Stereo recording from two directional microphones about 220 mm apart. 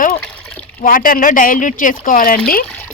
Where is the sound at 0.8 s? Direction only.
40° left (ahead or behind).